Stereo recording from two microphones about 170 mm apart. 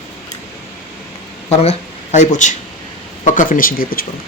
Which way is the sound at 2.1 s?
45° left (ahead or behind).